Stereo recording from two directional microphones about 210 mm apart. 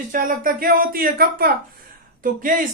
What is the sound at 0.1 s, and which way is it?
Speech, 40° right (ahead or behind).